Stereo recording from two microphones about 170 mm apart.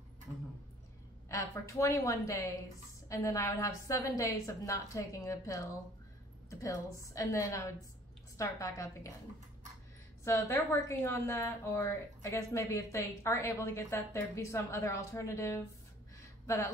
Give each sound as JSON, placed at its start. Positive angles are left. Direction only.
{"t": 1.3, "sound": "a woman's voice", "side_deg": 15}
{"t": 6.6, "sound": "a woman's voice", "side_deg": 20}
{"t": 10.2, "sound": "a woman's voice", "side_deg": 15}
{"t": 16.2, "sound": "a sound", "side_deg": 20}